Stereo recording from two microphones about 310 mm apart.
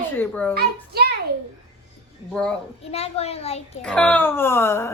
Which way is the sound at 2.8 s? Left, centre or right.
Centre.